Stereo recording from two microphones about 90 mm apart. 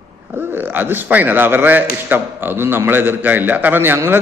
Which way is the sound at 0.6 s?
20° right (ahead or behind).